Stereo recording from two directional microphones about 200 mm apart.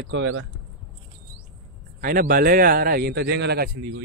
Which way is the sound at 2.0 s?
45° right (ahead or behind).